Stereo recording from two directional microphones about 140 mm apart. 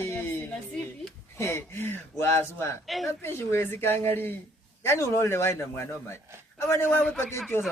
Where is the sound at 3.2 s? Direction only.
15° left (ahead or behind).